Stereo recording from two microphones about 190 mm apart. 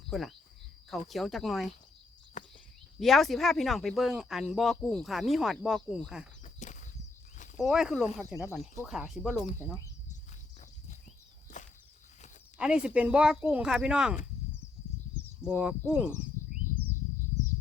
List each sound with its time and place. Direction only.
0.1 s speech: centre (ahead or behind)
2.4 s a sound: 40° left (ahead or behind)
3.0 s speech: centre (ahead or behind)
6.4 s whip: 40° left (ahead or behind)
7.5 s speech: centre (ahead or behind)
11.6 s a sound: 40° left (ahead or behind)
12.5 s speech: 5° right (ahead or behind)
15.4 s speech: 5° right (ahead or behind)